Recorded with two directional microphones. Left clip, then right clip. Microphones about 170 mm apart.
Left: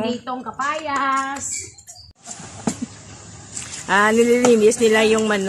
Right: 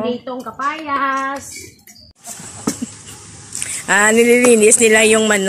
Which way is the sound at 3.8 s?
15° right (ahead or behind).